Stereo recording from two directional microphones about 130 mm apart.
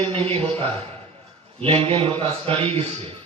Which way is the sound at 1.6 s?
45° right (ahead or behind).